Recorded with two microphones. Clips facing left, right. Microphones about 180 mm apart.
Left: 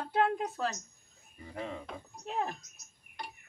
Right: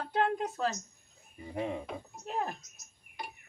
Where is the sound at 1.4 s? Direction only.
20° right (ahead or behind).